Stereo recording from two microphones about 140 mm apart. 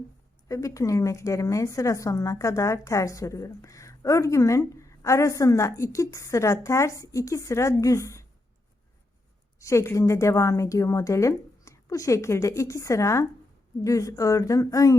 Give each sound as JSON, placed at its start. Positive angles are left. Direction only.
{"t": 0.4, "sound": "a woman's voice", "side_deg": 25}
{"t": 9.6, "sound": "a woman's voice", "side_deg": 20}